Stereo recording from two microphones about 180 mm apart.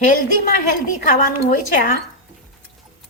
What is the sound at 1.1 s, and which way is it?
Speech, 50° left (ahead or behind).